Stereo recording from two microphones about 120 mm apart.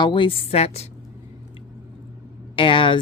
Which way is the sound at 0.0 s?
45° left (ahead or behind).